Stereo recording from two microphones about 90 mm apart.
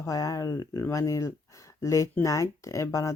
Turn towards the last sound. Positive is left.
turn(degrees=35)  # may be behind; listen again after turning